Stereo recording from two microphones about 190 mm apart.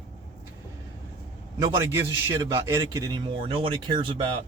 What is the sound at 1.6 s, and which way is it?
Speech, 15° right (ahead or behind).